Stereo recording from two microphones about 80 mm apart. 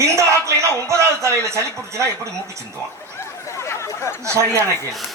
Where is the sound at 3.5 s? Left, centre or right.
Left.